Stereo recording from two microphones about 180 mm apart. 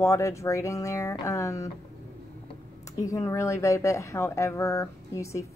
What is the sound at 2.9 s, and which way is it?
Speech, 20° left (ahead or behind).